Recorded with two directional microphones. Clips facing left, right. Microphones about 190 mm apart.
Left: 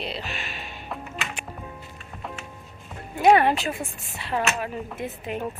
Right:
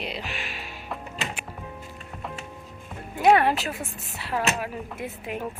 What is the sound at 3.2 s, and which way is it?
A woman's voice, centre (ahead or behind).